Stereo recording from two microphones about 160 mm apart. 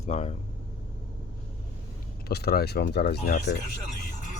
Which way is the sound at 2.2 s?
80° left.